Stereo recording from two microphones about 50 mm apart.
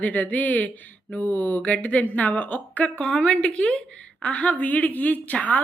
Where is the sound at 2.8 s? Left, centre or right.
Centre.